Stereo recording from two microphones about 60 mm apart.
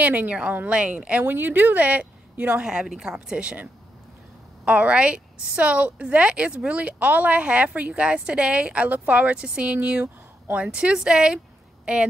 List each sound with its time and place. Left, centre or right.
0.0 s a woman's voice: right
1.2 s a woman's voice: right
2.6 s a woman's voice: centre
4.6 s a woman's voice: right